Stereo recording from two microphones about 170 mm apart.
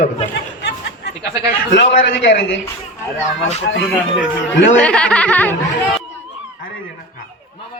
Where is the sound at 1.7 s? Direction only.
90° left.